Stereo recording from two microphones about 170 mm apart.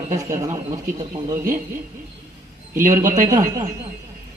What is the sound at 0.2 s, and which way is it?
A man's voice, 20° right (ahead or behind).